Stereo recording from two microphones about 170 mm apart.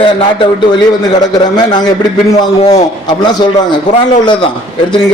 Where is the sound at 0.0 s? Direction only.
30° left (ahead or behind).